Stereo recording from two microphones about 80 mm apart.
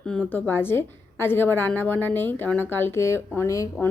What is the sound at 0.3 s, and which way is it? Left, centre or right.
A woman's voice, left.